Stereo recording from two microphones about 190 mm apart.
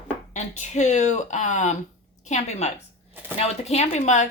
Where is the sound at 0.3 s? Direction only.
35° left (ahead or behind).